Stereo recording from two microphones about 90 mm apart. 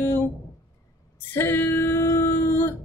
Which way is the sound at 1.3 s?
25° left (ahead or behind).